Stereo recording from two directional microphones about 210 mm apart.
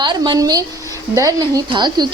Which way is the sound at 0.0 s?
20° right (ahead or behind).